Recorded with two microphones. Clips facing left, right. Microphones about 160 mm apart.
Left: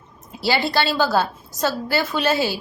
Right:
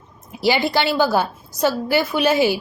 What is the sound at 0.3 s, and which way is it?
A woman's voice, 15° right (ahead or behind).